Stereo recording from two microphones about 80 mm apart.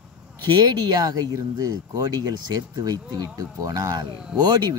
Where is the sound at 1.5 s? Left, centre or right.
Right.